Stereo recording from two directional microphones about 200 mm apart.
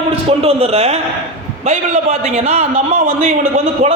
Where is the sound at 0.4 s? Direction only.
30° right (ahead or behind).